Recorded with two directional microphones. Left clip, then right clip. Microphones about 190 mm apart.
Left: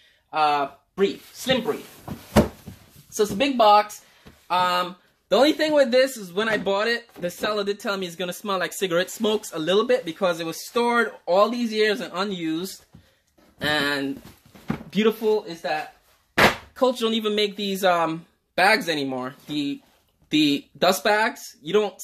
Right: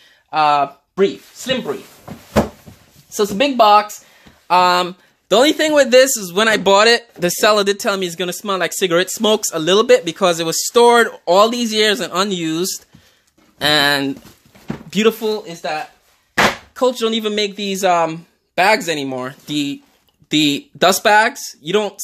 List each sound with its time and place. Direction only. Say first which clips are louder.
0.3 s speech: right 7 dB; 65° right (ahead or behind)
3.2 s speech: right 6 dB; 55° right (ahead or behind)
5.3 s speech: right 6 dB; 40° right (ahead or behind); by 14.1 s 65° right (ahead or behind)
14.9 s speech: right 5 dB; 35° right (ahead or behind)
16.7 s speech: right 5 dB; 25° right (ahead or behind)